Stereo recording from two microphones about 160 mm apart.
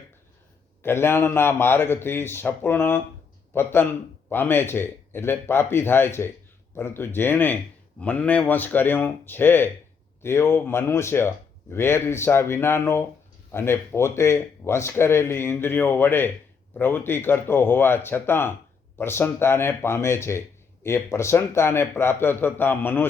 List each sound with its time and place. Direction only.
0.8 s a man's voice: 15° left (ahead or behind)